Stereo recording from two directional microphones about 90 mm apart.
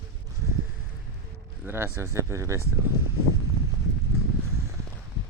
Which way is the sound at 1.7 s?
25° right (ahead or behind).